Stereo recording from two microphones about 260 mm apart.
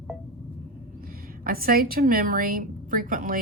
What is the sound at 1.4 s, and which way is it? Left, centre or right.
A woman's voice, right.